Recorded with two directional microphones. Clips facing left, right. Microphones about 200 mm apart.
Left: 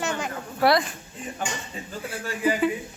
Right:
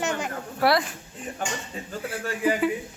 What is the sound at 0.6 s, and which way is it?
Speech, 5° right (ahead or behind).